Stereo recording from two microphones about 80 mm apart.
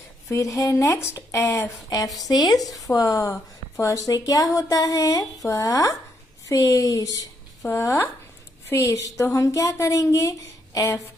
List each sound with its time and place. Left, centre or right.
0.3 s speech: left
2.1 s a woman's voice: left